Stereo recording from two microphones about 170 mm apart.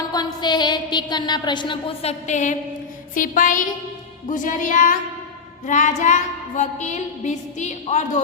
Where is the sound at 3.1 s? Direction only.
50° left (ahead or behind).